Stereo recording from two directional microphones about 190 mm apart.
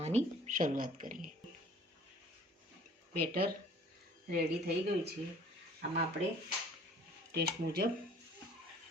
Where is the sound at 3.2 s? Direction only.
55° right (ahead or behind).